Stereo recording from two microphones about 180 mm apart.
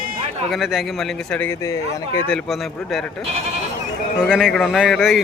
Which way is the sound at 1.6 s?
20° left (ahead or behind).